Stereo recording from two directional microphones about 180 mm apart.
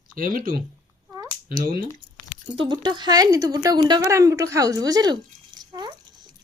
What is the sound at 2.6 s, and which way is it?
A woman's voice, 25° right (ahead or behind).